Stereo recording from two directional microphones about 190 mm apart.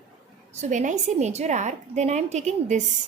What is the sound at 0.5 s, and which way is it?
A woman's voice, 40° right (ahead or behind).